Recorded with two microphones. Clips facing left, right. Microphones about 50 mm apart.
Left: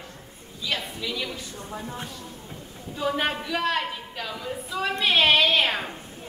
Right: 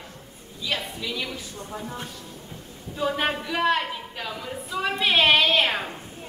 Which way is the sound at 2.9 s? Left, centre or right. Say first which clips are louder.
Right 1 dB; centre.